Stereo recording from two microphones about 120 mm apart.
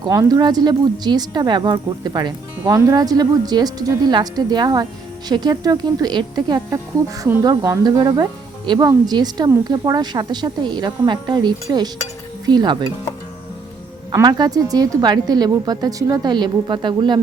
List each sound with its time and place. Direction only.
0.1 s speech: 30° right (ahead or behind)
14.1 s speech: 35° right (ahead or behind)